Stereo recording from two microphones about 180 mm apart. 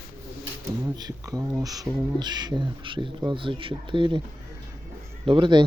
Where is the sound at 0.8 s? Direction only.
20° right (ahead or behind).